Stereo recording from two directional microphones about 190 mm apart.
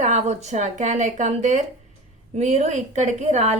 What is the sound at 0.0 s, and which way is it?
A woman's voice, 35° right (ahead or behind).